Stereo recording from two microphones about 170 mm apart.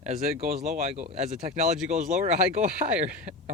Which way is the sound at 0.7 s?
45° right (ahead or behind).